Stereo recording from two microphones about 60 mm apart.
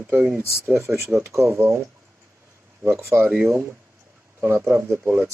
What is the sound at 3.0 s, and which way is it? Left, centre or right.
Speech, right.